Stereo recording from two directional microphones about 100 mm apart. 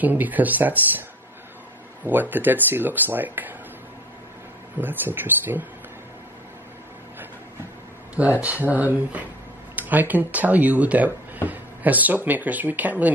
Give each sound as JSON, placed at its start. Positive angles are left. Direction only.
{"t": 0.0, "sound": "speech", "side_deg": -15}
{"t": 2.0, "sound": "speech", "side_deg": -20}
{"t": 4.7, "sound": "speech", "side_deg": -20}
{"t": 8.2, "sound": "speech", "side_deg": -15}